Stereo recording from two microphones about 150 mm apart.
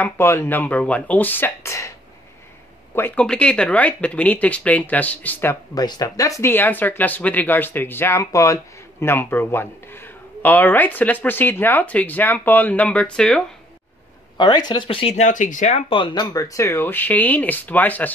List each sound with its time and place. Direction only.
0.0 s speech: 15° left (ahead or behind)
5.8 s speech: 25° left (ahead or behind); by 13.4 s 5° left (ahead or behind)
14.3 s speech: 30° left (ahead or behind); by 15.8 s 55° left (ahead or behind)
15.9 s speech: 30° left (ahead or behind)
16.3 s speech: 20° left (ahead or behind)